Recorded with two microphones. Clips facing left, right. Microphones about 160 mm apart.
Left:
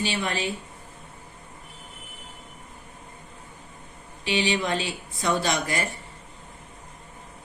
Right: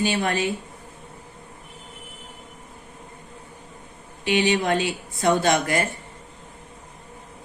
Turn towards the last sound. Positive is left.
turn(degrees=-50)  # may be behind; listen again after turning